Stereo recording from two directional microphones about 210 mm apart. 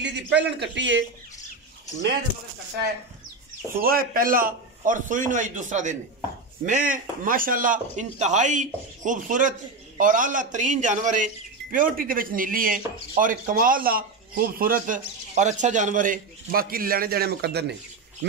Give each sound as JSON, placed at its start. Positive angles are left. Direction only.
{"t": 0.0, "sound": "a man's voice", "side_deg": -55}
{"t": 3.7, "sound": "speech", "side_deg": -45}